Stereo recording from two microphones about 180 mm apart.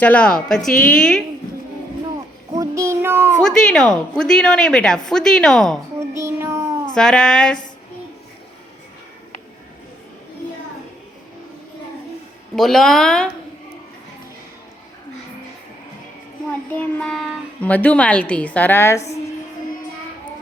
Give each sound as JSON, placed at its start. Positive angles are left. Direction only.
{"t": 0.0, "sound": "a woman's voice", "side_deg": 5}
{"t": 2.6, "sound": "speech", "side_deg": -15}
{"t": 3.4, "sound": "a woman's voice", "side_deg": 5}
{"t": 6.1, "sound": "child singing", "side_deg": -15}
{"t": 6.8, "sound": "a woman's voice", "side_deg": 5}
{"t": 12.5, "sound": "a woman's voice", "side_deg": 0}
{"t": 16.5, "sound": "a child's voice", "side_deg": 10}